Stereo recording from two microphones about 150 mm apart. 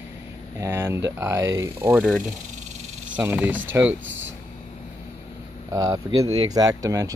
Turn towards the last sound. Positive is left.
turn(degrees=-25)  # may be behind; listen again after turning